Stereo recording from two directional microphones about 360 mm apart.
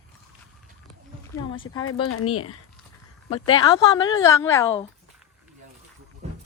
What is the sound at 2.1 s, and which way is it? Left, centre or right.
Speech, left.